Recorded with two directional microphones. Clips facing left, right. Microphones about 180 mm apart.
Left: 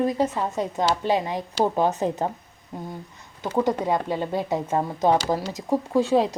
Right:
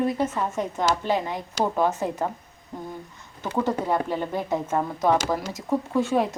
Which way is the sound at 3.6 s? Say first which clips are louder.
Right 1 dB; 15° left (ahead or behind).